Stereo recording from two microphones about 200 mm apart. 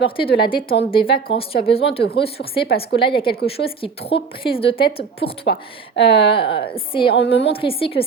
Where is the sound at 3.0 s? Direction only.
25° left (ahead or behind).